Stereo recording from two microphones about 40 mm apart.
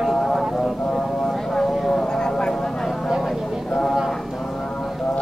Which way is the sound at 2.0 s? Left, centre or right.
Centre.